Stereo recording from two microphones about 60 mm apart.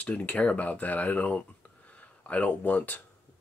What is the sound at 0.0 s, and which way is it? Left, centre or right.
Speech, left.